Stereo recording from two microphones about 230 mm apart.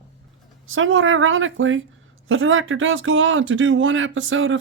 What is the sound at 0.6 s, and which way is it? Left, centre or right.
Speech, right.